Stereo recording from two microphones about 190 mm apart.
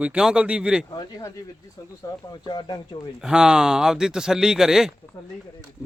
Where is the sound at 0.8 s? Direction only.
20° left (ahead or behind).